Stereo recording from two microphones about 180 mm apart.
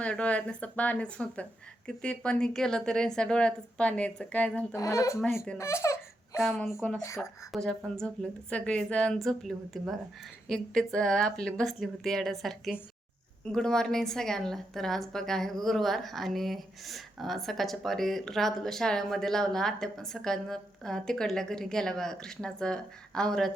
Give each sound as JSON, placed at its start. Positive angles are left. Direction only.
{"t": 0.0, "sound": "a woman's voice", "side_deg": 5}